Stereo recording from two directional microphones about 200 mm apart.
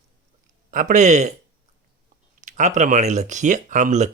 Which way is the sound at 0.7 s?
40° right (ahead or behind).